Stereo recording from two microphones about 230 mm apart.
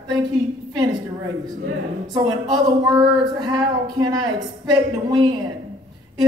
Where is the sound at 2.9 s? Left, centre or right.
Centre.